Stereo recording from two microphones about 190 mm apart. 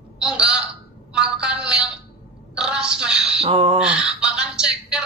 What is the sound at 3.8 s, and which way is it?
Music, 5° right (ahead or behind).